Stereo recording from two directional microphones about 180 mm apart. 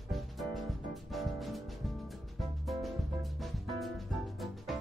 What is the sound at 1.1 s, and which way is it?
Music, centre (ahead or behind).